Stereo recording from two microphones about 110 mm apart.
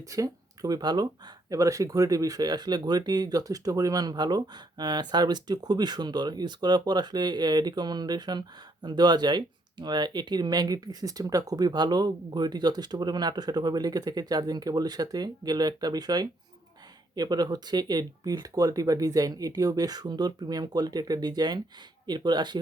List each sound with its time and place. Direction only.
0.1 s speech: 35° right (ahead or behind)